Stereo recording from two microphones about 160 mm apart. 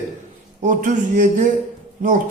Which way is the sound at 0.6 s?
55° right (ahead or behind).